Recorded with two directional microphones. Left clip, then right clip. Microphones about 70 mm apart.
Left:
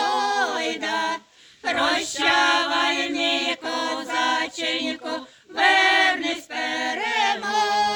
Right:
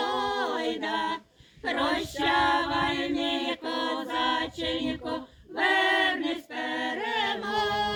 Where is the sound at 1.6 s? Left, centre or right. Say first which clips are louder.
Left 6 dB; left.